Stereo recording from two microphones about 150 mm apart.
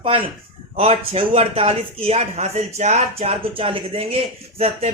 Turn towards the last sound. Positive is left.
turn(degrees=-40)  # may be behind; listen again after turning